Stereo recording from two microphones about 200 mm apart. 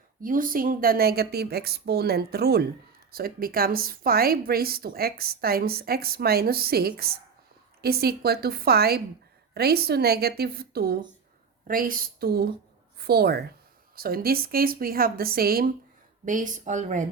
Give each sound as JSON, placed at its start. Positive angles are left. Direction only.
{"t": 0.2, "sound": "a woman's voice", "side_deg": -45}